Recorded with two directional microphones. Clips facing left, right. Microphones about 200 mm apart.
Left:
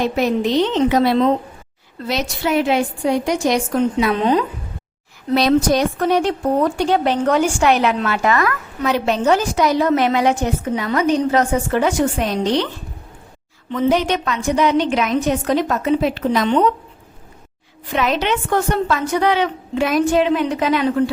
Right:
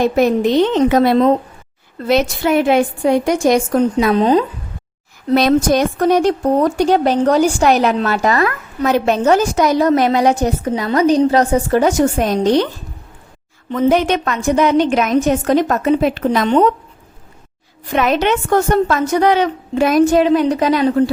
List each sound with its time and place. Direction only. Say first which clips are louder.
0.0 s a woman's voice: right 4 dB; 50° right (ahead or behind)
5.3 s a woman's voice: right 2 dB; 50° right (ahead or behind)
8.9 s a woman's voice: right 3 dB; 50° right (ahead or behind)
13.7 s a woman's voice: right 3 dB; 50° right (ahead or behind)
17.9 s a woman's voice: right 4 dB; 50° right (ahead or behind)